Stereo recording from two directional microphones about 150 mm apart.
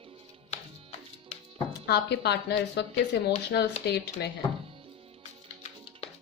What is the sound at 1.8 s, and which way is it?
Speech, 90° left.